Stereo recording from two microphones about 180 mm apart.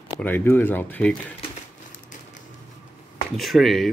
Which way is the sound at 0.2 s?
10° left (ahead or behind).